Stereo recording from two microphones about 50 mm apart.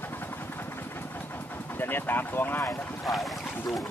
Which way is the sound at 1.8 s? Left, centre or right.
Left.